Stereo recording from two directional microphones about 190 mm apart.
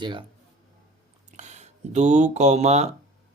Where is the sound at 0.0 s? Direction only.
25° right (ahead or behind).